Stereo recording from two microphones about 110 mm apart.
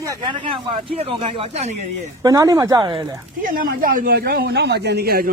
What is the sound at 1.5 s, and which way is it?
Speech, 90° right.